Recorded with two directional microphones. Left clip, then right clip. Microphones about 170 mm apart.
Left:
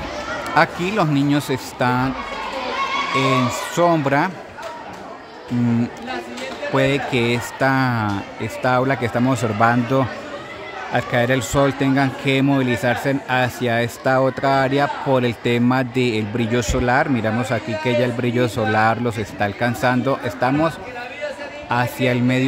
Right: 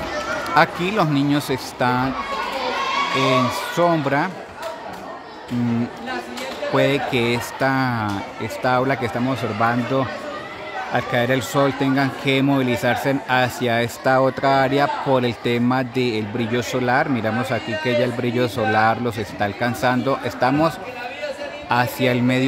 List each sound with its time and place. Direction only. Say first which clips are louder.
0.6 s a man's voice: even; 10° left (ahead or behind)
3.2 s a man's voice: left 1 dB; 10° left (ahead or behind)
6.7 s a man's voice: even; 5° left (ahead or behind)
9.3 s a man's voice: left 4 dB; 20° left (ahead or behind); by 22.5 s 5° left (ahead or behind)